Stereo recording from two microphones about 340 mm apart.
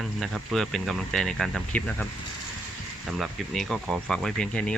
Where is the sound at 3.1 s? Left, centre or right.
Centre.